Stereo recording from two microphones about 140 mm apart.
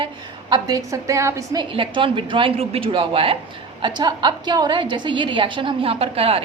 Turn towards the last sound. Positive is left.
turn(degrees=-45)  # may be behind; listen again after turning